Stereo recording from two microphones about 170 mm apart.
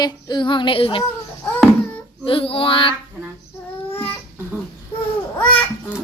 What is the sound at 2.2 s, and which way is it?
Child singing, 30° left (ahead or behind).